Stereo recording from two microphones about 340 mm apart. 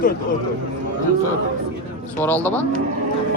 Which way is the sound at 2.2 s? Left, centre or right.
Centre.